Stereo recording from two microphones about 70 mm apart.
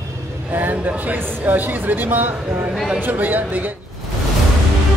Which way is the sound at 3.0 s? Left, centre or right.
Right.